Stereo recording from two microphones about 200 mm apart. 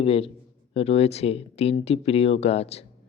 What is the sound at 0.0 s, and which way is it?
Speech, 30° left (ahead or behind).